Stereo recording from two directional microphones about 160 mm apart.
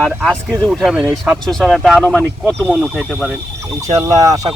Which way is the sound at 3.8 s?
20° right (ahead or behind).